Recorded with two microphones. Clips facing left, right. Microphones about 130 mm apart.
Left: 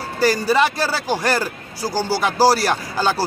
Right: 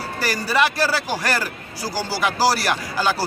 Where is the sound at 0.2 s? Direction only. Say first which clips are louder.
Left 4 dB; 25° left (ahead or behind).